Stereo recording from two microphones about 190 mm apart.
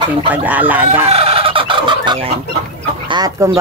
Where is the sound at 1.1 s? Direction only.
30° right (ahead or behind).